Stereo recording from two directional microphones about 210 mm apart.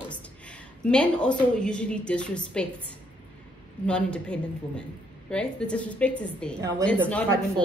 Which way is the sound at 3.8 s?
5° left (ahead or behind).